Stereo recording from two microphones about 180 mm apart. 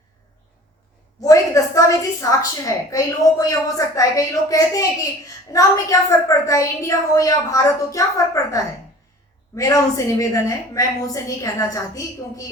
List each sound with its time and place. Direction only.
1.2 s a woman's voice: 20° left (ahead or behind)